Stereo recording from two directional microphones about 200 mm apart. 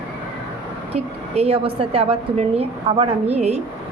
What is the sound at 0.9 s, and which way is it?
A woman's voice, 30° right (ahead or behind).